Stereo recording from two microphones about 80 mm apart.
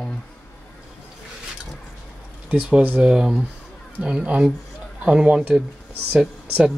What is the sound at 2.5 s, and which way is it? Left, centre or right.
Speech, right.